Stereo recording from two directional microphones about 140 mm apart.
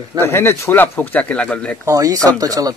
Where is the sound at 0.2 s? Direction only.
15° left (ahead or behind).